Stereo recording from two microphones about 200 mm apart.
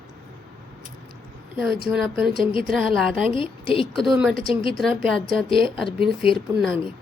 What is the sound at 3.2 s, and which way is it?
Speech, 25° left (ahead or behind).